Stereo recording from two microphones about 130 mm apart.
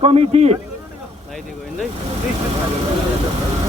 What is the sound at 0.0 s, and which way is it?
Speech, 50° right (ahead or behind).